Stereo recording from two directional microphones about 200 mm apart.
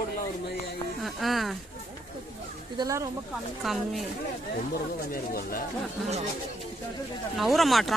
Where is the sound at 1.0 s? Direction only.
Centre (ahead or behind).